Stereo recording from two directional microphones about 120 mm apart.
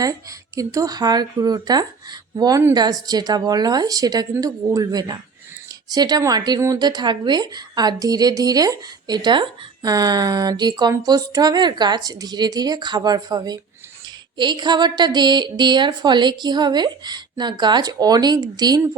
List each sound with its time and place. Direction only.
0.0 s a woman's voice: 30° right (ahead or behind)